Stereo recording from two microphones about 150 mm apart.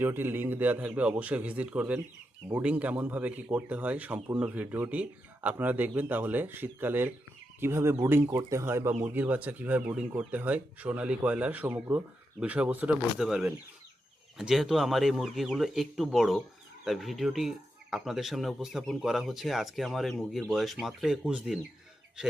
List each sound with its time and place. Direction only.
0.0 s speech: 15° right (ahead or behind)